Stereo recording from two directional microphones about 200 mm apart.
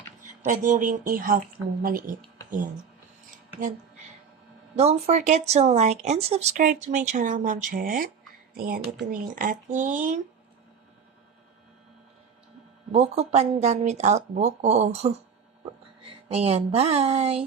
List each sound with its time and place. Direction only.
0.4 s speech: 40° right (ahead or behind)
4.7 s speech: 30° right (ahead or behind)
12.9 s speech: 30° right (ahead or behind)